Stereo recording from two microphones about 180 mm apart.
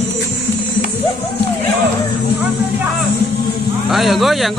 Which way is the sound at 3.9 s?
Centre (ahead or behind).